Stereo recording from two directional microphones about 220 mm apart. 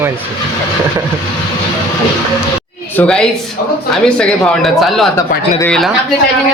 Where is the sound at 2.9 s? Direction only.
5° left (ahead or behind).